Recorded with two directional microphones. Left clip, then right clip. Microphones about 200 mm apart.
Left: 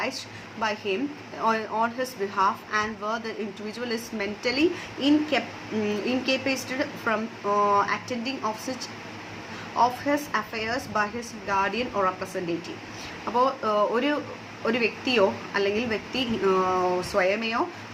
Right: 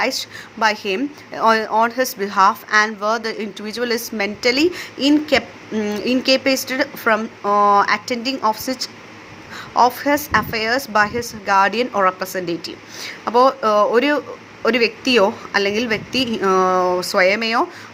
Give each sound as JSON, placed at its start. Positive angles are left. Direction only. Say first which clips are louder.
{"t": 0.0, "sound": "speech", "louder": "right 10 dB", "side_deg": -50}
{"t": 9.7, "sound": "speech", "louder": "right 8 dB", "side_deg": -50}